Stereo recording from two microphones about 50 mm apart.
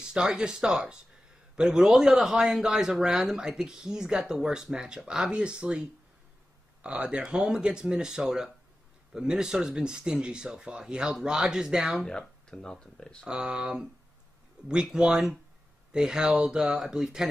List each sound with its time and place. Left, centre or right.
0.0 s a man's voice: centre
2.1 s speech: centre
12.0 s speech: centre
13.3 s speech: centre